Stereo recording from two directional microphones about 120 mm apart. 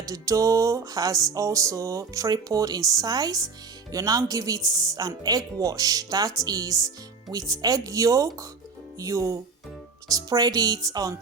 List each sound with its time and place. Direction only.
0.1 s speech: 25° right (ahead or behind)